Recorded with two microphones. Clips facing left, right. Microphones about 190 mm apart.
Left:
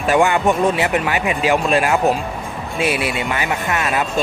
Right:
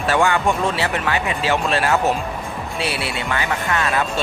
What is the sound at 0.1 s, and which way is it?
Speech, 20° left (ahead or behind).